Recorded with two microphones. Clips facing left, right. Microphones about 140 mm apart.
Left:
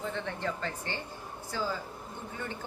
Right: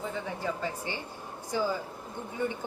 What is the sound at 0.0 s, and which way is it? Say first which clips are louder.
A woman's voice: right 1 dB; 5° right (ahead or behind).